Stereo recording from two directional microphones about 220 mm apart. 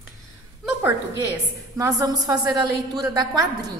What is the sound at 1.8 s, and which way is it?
A woman's voice, 15° right (ahead or behind).